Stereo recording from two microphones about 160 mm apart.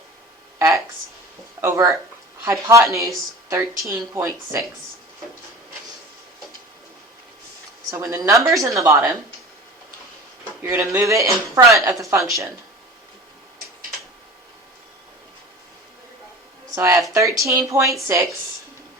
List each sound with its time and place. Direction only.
1.6 s speech: 20° right (ahead or behind)
7.9 s speech: 20° right (ahead or behind)
10.6 s speech: 15° right (ahead or behind)
16.7 s speech: 20° right (ahead or behind)